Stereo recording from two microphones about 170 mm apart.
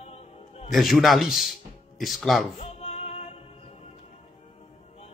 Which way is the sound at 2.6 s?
35° left (ahead or behind).